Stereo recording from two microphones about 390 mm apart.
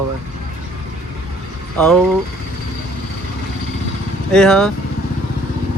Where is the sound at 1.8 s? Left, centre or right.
Centre.